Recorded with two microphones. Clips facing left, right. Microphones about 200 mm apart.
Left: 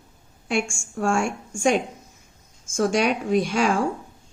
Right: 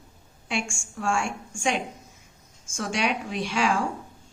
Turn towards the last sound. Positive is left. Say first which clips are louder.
# left 5 dB
turn(degrees=45)  # may be behind; listen again after turning